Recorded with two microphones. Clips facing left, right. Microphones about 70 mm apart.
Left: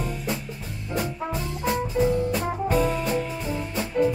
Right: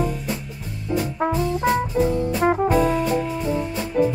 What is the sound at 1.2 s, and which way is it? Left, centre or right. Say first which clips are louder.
Music: right 7 dB; right.